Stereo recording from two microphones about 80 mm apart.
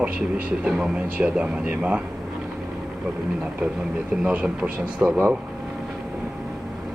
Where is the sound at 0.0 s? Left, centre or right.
Centre.